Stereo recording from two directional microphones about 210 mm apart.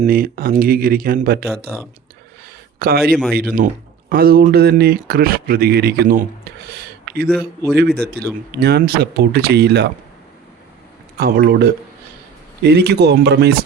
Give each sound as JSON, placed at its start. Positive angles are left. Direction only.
{"t": 0.0, "sound": "speech", "side_deg": -45}
{"t": 2.7, "sound": "speech", "side_deg": -45}
{"t": 6.7, "sound": "a sound", "side_deg": -50}
{"t": 7.9, "sound": "speech", "side_deg": -50}
{"t": 11.2, "sound": "speech", "side_deg": -45}